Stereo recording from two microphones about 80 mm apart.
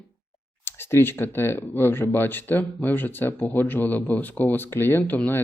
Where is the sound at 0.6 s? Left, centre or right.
Left.